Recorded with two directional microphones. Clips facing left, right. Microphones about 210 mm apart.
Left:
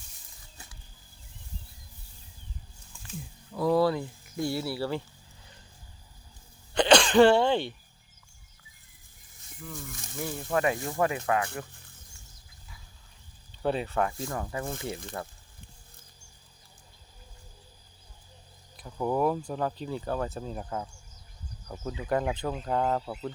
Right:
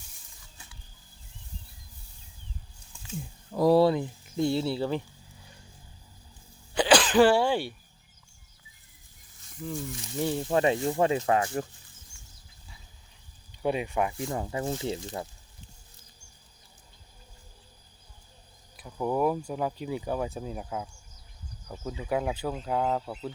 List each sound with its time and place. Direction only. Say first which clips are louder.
3.5 s speech: right 4 dB; 40° right (ahead or behind)
3.8 s speech: right 3 dB; 20° right (ahead or behind)
6.7 s cough: left 1 dB; 5° right (ahead or behind)
9.6 s speech: right 7 dB; 30° right (ahead or behind)
13.6 s speech: even; 10° right (ahead or behind)
18.8 s speech: even; 5° right (ahead or behind)